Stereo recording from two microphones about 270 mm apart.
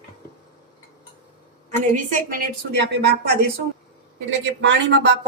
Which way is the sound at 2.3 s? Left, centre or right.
Right.